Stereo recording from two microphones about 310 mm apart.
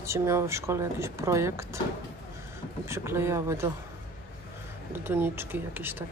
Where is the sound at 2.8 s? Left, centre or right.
Centre.